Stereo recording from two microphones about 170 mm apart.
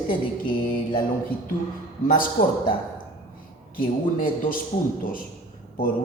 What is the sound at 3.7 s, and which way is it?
Speech, 55° left (ahead or behind).